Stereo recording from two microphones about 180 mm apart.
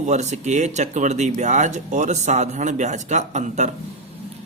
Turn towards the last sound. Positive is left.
turn(degrees=-40)  # may be behind; listen again after turning